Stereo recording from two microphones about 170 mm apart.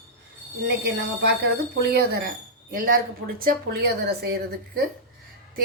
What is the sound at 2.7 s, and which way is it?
Speech, 60° right (ahead or behind).